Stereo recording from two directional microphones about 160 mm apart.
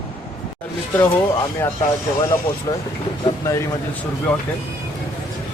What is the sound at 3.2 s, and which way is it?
Speech, 20° left (ahead or behind).